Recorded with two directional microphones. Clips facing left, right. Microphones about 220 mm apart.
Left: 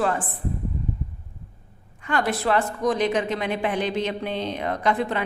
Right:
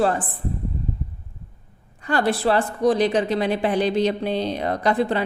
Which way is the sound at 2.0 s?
35° right (ahead or behind).